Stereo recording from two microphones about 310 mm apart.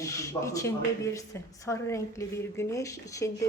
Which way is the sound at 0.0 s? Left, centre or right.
Centre.